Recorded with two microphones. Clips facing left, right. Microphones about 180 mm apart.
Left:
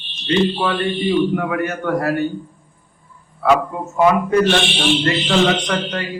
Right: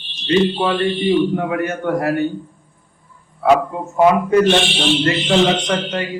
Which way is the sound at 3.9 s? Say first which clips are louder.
Right 2 dB; 25° right (ahead or behind).